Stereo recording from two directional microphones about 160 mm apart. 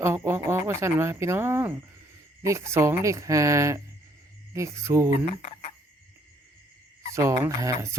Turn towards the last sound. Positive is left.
turn(degrees=-20)  # may be behind; listen again after turning